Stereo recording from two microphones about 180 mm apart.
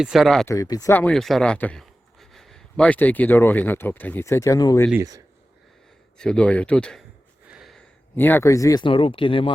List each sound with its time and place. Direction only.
0.0 s speech: centre (ahead or behind)
0.4 s a man's voice: 20° left (ahead or behind)
4.9 s speech: 20° right (ahead or behind)
6.1 s speech: 5° left (ahead or behind)
7.5 s a sound: centre (ahead or behind)
8.1 s speech: 10° left (ahead or behind); by 9.5 s 30° left (ahead or behind)